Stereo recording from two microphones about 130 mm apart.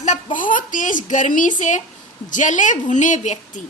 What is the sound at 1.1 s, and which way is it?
A woman's voice, 80° left.